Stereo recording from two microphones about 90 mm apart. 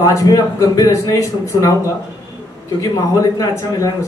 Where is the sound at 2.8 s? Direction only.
40° left (ahead or behind).